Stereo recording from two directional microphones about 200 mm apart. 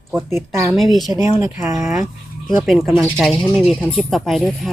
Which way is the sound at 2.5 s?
Centre (ahead or behind).